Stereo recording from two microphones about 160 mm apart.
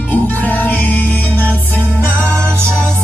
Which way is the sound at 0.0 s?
10° left (ahead or behind).